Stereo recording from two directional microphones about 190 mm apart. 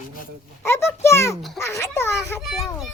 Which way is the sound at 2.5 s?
Centre (ahead or behind).